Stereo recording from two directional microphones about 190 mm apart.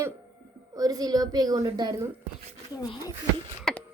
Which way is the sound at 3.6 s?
Centre (ahead or behind).